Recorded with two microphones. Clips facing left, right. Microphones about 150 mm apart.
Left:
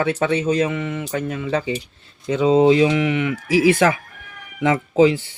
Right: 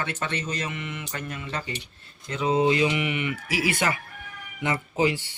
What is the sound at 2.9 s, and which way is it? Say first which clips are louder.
Speech: left 8 dB; 90° left.